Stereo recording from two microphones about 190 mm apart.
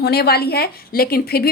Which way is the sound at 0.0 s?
55° left (ahead or behind).